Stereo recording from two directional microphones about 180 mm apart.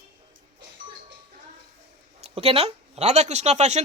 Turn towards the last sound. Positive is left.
turn(degrees=-40)  # may be behind; listen again after turning